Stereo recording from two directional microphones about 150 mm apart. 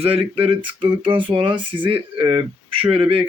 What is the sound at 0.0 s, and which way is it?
Speech, 40° right (ahead or behind).